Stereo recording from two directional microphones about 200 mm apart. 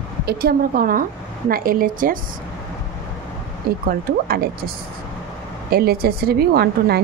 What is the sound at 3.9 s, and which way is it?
Speech, 50° right (ahead or behind).